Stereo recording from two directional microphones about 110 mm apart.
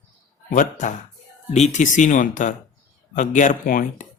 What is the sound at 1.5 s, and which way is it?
Speech, 85° left.